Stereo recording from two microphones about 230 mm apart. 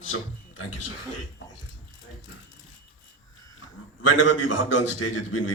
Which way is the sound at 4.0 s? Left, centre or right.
Left.